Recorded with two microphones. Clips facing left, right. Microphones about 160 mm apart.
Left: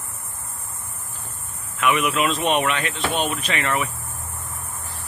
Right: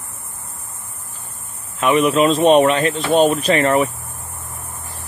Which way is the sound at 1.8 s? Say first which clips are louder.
Right 6 dB; 30° right (ahead or behind).